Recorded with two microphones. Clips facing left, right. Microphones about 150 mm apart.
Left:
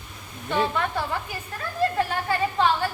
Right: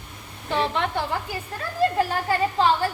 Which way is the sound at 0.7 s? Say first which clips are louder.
Right 1 dB; 30° right (ahead or behind).